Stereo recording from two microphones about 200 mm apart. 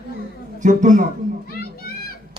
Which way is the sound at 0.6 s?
40° right (ahead or behind).